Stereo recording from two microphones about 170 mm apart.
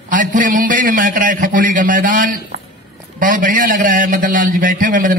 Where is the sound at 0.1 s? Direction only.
50° right (ahead or behind).